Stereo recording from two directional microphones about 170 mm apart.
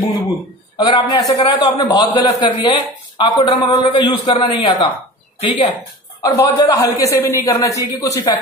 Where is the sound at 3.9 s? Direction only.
25° left (ahead or behind).